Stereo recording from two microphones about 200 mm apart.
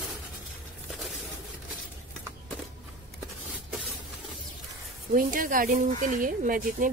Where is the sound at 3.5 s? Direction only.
5° right (ahead or behind).